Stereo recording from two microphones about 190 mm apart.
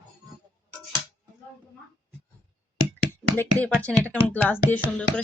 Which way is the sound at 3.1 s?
10° left (ahead or behind).